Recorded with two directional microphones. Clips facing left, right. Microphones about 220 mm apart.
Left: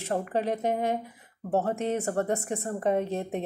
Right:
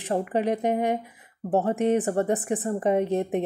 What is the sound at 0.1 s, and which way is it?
A woman's voice, 15° right (ahead or behind).